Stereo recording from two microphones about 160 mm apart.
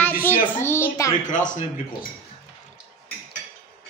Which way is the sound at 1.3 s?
55° left (ahead or behind).